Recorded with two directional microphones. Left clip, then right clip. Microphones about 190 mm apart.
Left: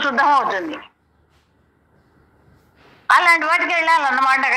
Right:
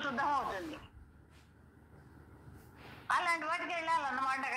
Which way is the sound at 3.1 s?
50° left (ahead or behind).